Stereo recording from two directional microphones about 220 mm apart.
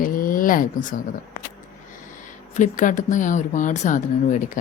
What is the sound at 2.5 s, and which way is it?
A woman's voice, 35° left (ahead or behind).